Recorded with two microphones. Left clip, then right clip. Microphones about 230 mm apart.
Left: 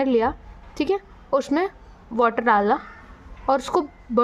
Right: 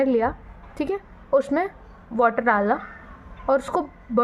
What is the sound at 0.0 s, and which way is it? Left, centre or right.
A woman's voice, left.